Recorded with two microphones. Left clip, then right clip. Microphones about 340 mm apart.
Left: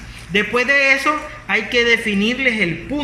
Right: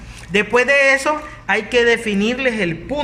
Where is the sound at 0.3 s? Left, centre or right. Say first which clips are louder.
Right 2 dB; right.